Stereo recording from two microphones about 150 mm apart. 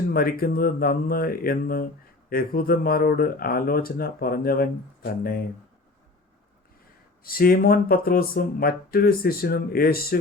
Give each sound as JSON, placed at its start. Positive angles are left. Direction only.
{"t": 0.1, "sound": "speech", "side_deg": 80}
{"t": 7.3, "sound": "speech", "side_deg": 80}